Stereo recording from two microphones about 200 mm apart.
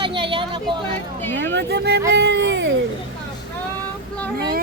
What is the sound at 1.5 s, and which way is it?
Speech, 55° right (ahead or behind).